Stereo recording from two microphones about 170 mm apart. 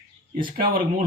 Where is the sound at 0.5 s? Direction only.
60° right (ahead or behind).